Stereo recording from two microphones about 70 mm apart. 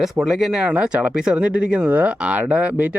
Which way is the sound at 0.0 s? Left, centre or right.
Centre.